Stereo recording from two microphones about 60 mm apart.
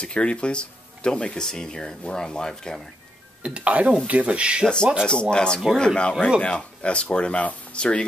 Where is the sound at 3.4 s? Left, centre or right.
Right.